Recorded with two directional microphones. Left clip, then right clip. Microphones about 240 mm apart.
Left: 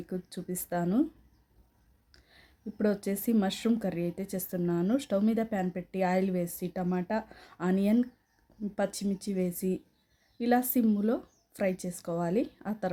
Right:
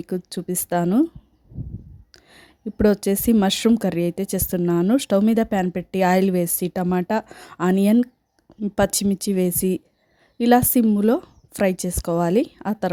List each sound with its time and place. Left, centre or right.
0.0 s speech: right
2.1 s speech: right